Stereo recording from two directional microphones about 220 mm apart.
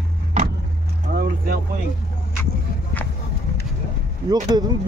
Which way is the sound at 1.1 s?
45° right (ahead or behind).